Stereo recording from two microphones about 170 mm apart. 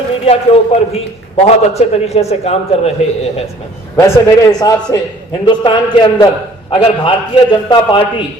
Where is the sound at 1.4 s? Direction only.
35° left (ahead or behind).